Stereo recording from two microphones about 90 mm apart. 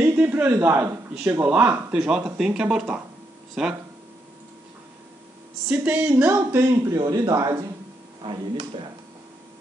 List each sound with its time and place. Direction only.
0.0 s a man's voice: 25° right (ahead or behind); by 3.7 s 5° right (ahead or behind)
5.7 s speech: 15° right (ahead or behind)
6.6 s a man's voice: 30° right (ahead or behind)
8.2 s speech: 65° right (ahead or behind)